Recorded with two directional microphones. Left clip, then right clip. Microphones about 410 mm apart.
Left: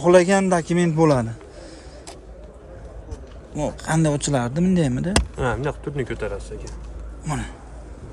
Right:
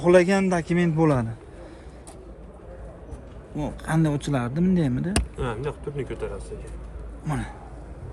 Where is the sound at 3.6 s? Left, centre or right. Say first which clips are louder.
Left 4 dB; centre.